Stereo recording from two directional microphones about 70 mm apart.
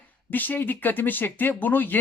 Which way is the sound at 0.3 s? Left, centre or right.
Left.